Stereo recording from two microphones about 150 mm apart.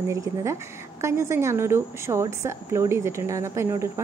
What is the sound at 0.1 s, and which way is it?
A woman's voice, 20° right (ahead or behind).